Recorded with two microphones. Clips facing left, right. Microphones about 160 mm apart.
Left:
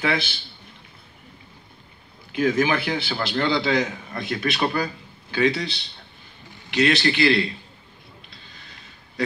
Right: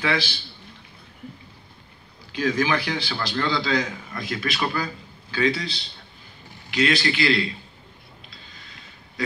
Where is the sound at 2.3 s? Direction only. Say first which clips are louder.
Left 2 dB; 25° left (ahead or behind).